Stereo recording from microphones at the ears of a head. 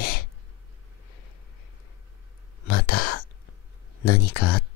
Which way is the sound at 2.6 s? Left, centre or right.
Left.